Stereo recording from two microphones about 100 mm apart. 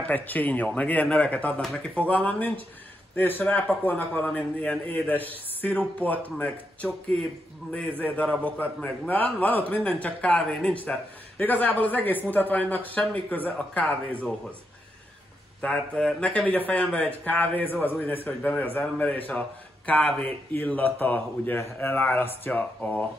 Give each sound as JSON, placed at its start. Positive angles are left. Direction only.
{"t": 0.1, "sound": "a man's voice", "side_deg": 15}
{"t": 1.6, "sound": "speech", "side_deg": 0}
{"t": 2.0, "sound": "a man's voice", "side_deg": 15}
{"t": 15.6, "sound": "a man's voice", "side_deg": 10}